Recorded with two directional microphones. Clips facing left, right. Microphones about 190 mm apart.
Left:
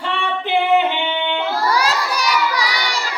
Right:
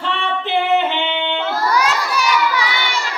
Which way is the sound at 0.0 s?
15° left (ahead or behind).